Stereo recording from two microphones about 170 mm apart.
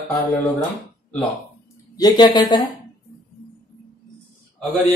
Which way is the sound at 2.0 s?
25° left (ahead or behind).